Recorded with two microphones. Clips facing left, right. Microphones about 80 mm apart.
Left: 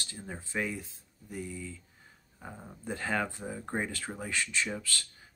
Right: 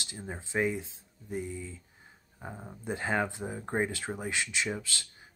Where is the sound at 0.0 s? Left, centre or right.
Right.